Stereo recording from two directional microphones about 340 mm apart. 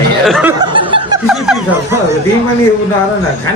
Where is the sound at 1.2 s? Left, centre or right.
Centre.